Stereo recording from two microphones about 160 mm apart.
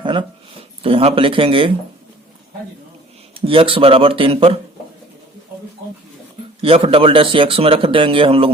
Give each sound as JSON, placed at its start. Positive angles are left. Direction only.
{"t": 0.0, "sound": "a sound", "side_deg": -30}
{"t": 0.8, "sound": "speech", "side_deg": -35}
{"t": 3.4, "sound": "speech", "side_deg": -35}
{"t": 6.6, "sound": "speech", "side_deg": -35}